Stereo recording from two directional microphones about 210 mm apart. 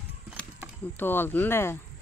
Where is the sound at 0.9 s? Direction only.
10° left (ahead or behind).